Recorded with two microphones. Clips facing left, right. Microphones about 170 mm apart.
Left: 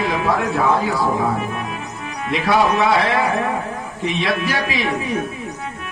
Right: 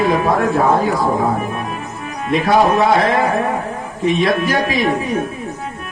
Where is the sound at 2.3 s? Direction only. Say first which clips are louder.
Right 4 dB; 45° right (ahead or behind).